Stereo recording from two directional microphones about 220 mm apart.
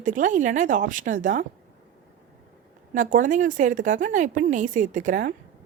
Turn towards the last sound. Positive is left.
turn(degrees=-35)  # may be behind; listen again after turning